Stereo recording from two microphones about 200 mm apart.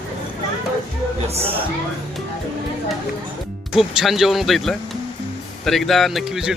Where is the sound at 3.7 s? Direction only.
5° right (ahead or behind).